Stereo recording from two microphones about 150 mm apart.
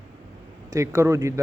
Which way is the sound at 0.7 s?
20° right (ahead or behind).